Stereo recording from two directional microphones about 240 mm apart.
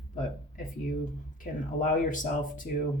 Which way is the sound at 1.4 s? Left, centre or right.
Left.